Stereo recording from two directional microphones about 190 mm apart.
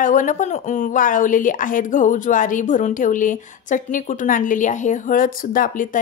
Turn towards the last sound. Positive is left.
turn(degrees=45)  # may be behind; listen again after turning